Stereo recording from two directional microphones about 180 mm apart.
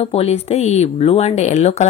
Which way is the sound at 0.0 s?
35° left (ahead or behind).